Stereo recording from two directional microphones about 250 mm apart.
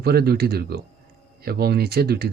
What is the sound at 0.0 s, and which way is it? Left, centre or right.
Speech, right.